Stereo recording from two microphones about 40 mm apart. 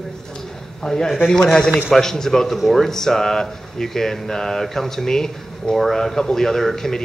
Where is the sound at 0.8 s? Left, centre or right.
Centre.